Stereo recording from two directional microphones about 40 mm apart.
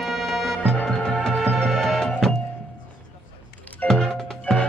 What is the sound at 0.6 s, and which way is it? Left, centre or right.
Music, left.